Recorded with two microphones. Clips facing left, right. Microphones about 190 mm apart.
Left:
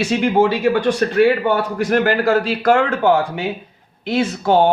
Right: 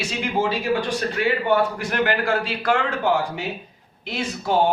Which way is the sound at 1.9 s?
40° left (ahead or behind).